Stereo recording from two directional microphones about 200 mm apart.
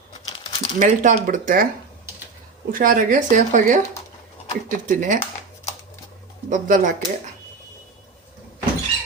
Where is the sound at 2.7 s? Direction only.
45° right (ahead or behind).